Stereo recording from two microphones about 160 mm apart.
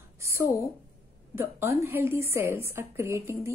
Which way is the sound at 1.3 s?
15° right (ahead or behind).